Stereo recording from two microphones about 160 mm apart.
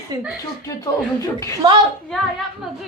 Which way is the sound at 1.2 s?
20° left (ahead or behind).